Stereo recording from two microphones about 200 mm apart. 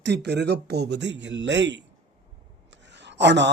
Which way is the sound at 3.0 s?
60° right (ahead or behind).